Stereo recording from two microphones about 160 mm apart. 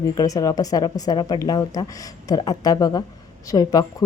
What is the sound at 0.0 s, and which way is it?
Speech, 25° left (ahead or behind).